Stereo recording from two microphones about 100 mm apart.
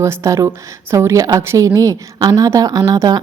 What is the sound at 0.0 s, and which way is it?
A woman's voice, 30° right (ahead or behind).